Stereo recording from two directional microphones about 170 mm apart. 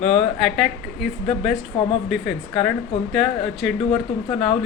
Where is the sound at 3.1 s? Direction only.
Centre (ahead or behind).